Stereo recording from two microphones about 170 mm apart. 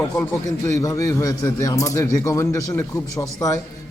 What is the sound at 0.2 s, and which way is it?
A man's voice, 20° left (ahead or behind).